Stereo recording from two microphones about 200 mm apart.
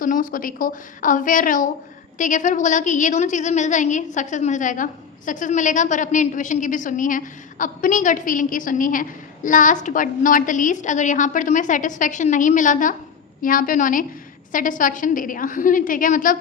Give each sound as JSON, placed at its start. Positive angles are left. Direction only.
{"t": 0.0, "sound": "a woman's voice", "side_deg": 45}